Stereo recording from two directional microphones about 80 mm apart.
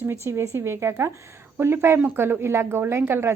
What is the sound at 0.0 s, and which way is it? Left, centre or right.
Speech, right.